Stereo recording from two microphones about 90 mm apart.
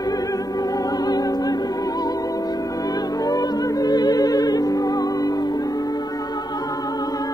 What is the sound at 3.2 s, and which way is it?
Music, 45° left (ahead or behind).